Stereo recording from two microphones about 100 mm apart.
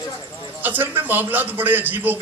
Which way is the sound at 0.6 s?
20° right (ahead or behind).